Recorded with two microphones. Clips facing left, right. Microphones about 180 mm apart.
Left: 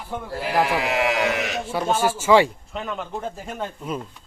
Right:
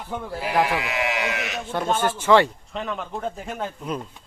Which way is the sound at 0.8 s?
40° left (ahead or behind).